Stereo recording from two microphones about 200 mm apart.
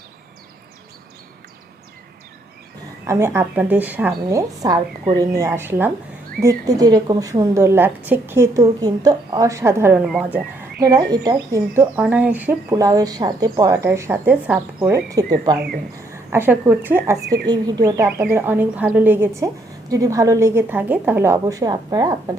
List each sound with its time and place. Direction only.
3.1 s speech: 15° right (ahead or behind)
10.8 s speech: 20° right (ahead or behind)
17.2 s speech: 55° right (ahead or behind)
17.5 s speech: 20° right (ahead or behind)